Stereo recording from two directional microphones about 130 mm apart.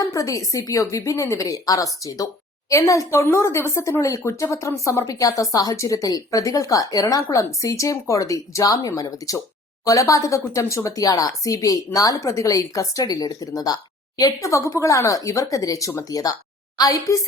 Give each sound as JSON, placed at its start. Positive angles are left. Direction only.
{"t": 0.0, "sound": "a woman's voice", "side_deg": 25}